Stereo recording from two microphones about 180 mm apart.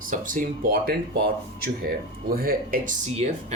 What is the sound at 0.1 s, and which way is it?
Speech, 50° right (ahead or behind).